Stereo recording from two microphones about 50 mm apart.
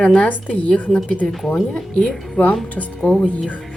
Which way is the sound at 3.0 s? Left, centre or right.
Left.